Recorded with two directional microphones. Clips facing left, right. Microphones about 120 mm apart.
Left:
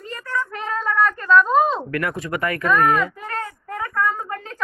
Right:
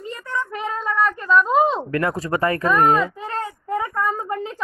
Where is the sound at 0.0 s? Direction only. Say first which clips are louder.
Even; 20° right (ahead or behind).